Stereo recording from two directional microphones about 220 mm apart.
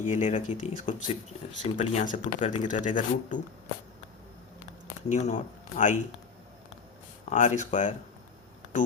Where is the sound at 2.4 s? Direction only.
25° left (ahead or behind).